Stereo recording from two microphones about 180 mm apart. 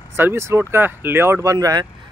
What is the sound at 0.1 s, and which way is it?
Speech, 15° right (ahead or behind).